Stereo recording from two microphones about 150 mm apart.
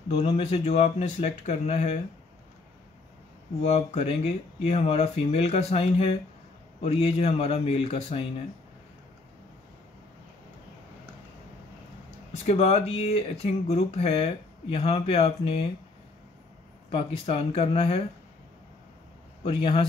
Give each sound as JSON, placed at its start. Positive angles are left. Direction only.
{"t": 0.1, "sound": "speech", "side_deg": 40}
{"t": 3.6, "sound": "speech", "side_deg": 45}
{"t": 12.4, "sound": "speech", "side_deg": 45}
{"t": 16.9, "sound": "speech", "side_deg": 40}
{"t": 19.4, "sound": "speech", "side_deg": 35}